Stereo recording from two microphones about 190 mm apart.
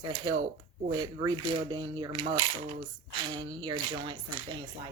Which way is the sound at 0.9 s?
20° right (ahead or behind).